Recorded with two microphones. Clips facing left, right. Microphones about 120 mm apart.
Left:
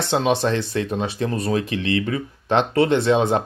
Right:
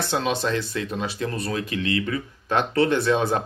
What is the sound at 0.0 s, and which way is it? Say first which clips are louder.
Speech: left 5 dB; 25° left (ahead or behind).